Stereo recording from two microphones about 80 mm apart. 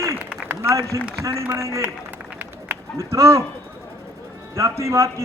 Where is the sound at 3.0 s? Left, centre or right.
Right.